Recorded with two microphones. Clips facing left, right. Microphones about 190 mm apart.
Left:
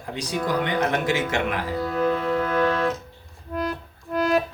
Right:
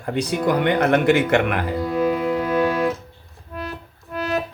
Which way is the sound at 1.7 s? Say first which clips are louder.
Right 2 dB; 15° right (ahead or behind).